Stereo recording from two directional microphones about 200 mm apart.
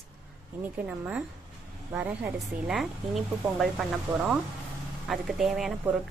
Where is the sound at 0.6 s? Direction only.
10° right (ahead or behind).